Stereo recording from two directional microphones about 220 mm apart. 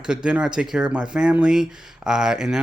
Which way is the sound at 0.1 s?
5° right (ahead or behind).